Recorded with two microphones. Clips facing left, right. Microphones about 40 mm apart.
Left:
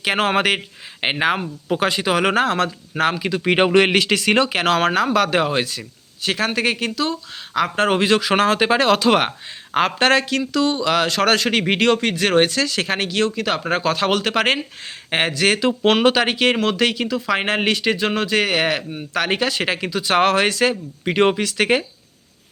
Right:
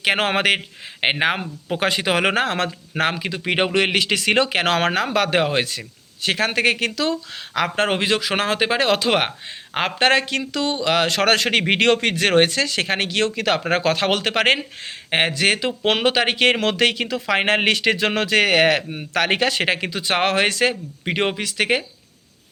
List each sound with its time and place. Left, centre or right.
0.0 s speech: right
1.0 s speech: right
1.7 s speech: right
3.2 s speech: centre
3.4 s speech: centre
4.3 s speech: right
6.2 s speech: right
6.7 s speech: right
7.9 s speech: centre; by 14.9 s right
15.1 s speech: right
16.2 s speech: right
20.5 s speech: right
21.0 s speech: centre